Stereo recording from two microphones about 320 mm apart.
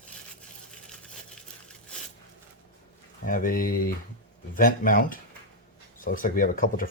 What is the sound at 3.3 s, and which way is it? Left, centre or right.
Speech, left.